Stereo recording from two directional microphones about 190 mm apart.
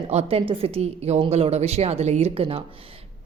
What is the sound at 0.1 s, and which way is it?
Speech, 35° right (ahead or behind).